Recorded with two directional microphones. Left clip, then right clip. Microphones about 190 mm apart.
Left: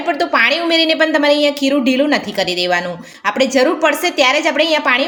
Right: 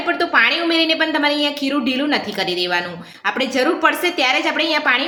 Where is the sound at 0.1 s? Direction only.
45° left (ahead or behind).